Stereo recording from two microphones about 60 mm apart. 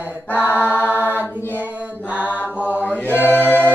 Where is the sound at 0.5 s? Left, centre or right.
Right.